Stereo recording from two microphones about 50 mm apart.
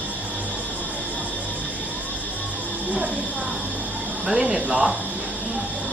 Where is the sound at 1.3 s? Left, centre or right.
Right.